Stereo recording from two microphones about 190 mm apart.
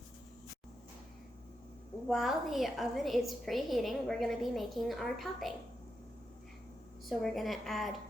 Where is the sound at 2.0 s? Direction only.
Centre (ahead or behind).